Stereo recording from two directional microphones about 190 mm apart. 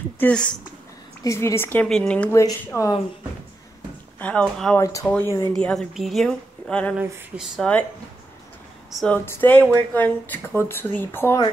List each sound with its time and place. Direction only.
0.2 s speech: 5° left (ahead or behind)
2.4 s speech: 20° left (ahead or behind)
4.2 s a woman's voice: 5° left (ahead or behind)
8.9 s speech: 5° left (ahead or behind)